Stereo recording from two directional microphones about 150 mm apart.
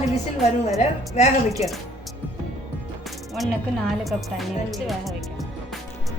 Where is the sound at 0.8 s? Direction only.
50° left (ahead or behind).